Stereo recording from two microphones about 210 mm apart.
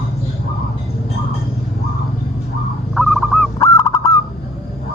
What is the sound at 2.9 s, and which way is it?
Owl, centre (ahead or behind).